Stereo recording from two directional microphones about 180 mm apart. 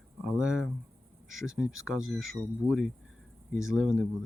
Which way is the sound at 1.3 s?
90° right.